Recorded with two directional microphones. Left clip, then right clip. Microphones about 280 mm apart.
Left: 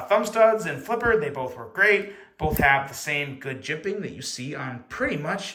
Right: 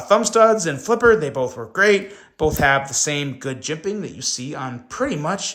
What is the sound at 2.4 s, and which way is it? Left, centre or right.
Speech, centre.